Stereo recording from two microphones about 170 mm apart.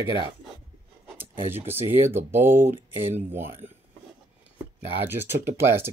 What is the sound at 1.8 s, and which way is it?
Speech, 15° right (ahead or behind).